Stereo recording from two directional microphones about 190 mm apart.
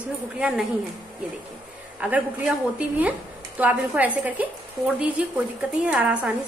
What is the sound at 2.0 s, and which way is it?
A woman's voice, 5° right (ahead or behind).